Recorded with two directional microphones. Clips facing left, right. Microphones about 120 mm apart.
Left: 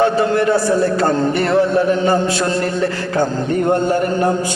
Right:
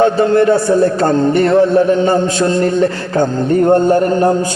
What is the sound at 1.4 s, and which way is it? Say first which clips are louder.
Music: right 5 dB; 45° right (ahead or behind).